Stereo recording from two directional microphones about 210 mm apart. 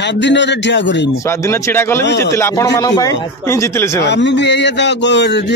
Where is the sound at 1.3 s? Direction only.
15° left (ahead or behind).